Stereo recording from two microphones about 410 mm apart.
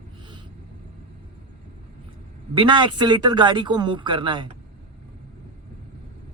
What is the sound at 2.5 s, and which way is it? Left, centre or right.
Speech, centre.